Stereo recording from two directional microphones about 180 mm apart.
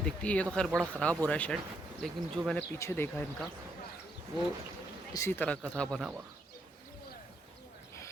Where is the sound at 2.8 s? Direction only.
15° left (ahead or behind).